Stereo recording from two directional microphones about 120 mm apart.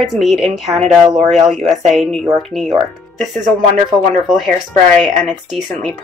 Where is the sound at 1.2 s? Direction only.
70° right (ahead or behind).